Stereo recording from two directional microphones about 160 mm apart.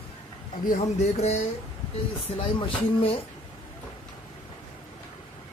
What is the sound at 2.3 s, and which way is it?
Speech, 35° left (ahead or behind).